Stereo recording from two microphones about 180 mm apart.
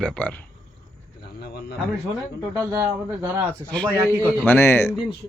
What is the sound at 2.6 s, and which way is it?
A man's voice, 15° right (ahead or behind).